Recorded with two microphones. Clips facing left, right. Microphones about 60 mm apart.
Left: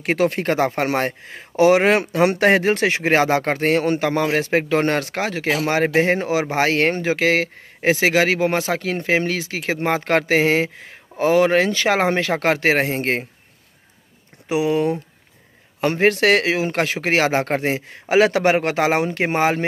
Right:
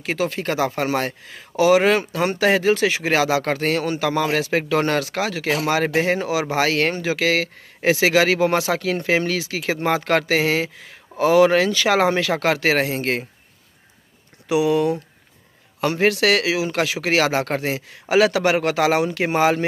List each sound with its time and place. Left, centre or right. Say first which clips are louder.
0.0 s speech: left 4 dB; left
14.5 s speech: right 1 dB; left
16.1 s speech: left 3 dB; left